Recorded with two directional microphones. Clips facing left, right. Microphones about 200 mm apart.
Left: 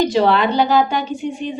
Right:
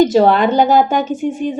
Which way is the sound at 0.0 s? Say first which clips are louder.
Right 4 dB; 45° right (ahead or behind).